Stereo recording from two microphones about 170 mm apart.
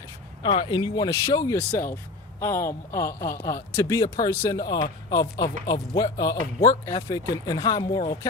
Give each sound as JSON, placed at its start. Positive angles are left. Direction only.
{"t": 0.4, "sound": "a man's voice", "side_deg": 30}